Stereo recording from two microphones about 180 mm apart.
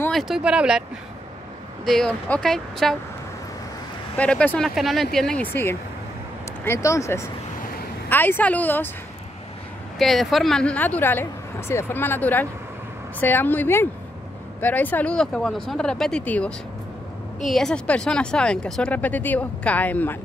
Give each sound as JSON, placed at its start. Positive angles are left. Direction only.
{"t": 0.1, "sound": "speech", "side_deg": 0}
{"t": 1.9, "sound": "speech", "side_deg": 5}
{"t": 4.2, "sound": "speech", "side_deg": 5}
{"t": 9.9, "sound": "speech", "side_deg": 0}